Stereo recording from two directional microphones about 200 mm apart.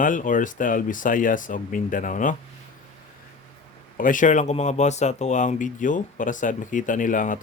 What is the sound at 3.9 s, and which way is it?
Speech, 40° left (ahead or behind).